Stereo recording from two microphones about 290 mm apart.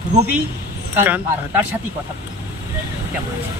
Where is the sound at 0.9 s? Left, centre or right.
Centre.